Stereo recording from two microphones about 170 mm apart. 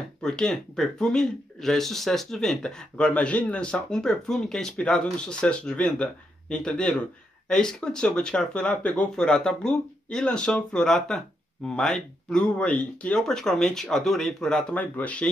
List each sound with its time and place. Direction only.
0.2 s speech: 5° left (ahead or behind)